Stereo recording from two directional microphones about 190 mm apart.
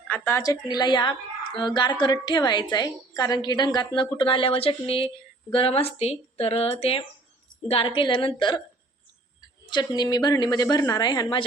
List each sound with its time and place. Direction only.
0.1 s a woman's voice: 10° left (ahead or behind)
9.6 s a woman's voice: 20° left (ahead or behind)